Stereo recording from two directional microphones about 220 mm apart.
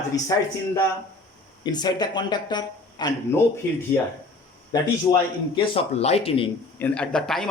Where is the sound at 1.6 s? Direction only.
20° left (ahead or behind).